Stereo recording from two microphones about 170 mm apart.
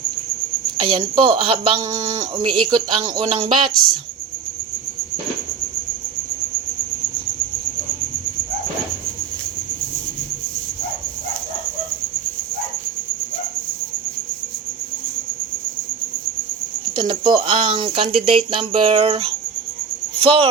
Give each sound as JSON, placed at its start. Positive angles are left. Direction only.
{"t": 0.8, "sound": "speech", "side_deg": -30}
{"t": 16.9, "sound": "speech", "side_deg": -30}